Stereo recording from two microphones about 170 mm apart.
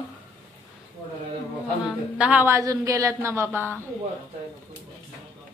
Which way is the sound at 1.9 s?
5° right (ahead or behind).